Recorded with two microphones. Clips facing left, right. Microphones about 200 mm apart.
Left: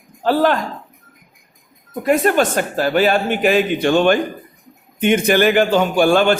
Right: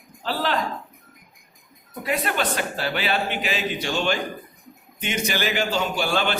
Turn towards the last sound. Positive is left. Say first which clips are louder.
# left 10 dB
turn(degrees=50)  # may be behind; listen again after turning